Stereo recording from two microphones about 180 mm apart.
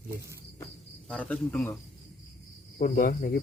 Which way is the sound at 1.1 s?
5° left (ahead or behind).